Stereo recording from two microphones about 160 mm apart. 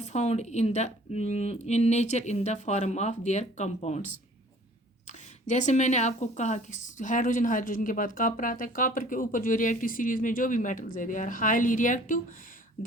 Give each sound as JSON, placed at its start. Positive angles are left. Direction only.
{"t": 0.0, "sound": "speech", "side_deg": 45}